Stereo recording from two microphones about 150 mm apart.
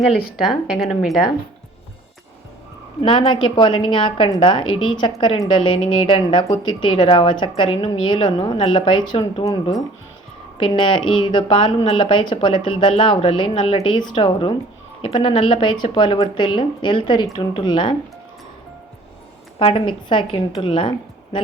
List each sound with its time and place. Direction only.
0.0 s speech: centre (ahead or behind)
3.0 s a woman's voice: 35° left (ahead or behind)
10.6 s a woman's voice: 35° left (ahead or behind)
19.5 s a woman's voice: 35° left (ahead or behind)